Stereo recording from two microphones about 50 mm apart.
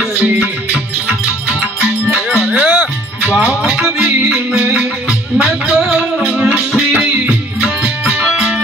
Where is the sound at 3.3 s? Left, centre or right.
Right.